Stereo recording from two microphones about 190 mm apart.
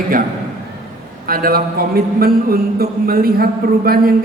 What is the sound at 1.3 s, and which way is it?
A man's voice, 50° right (ahead or behind).